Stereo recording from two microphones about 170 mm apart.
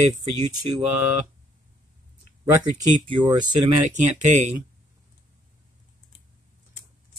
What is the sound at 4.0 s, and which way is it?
Speech, 45° right (ahead or behind).